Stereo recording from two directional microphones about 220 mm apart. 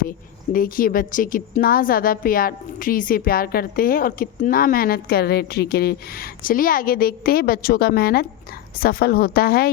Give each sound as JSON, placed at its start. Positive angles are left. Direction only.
{"t": 0.5, "sound": "a woman's voice", "side_deg": 40}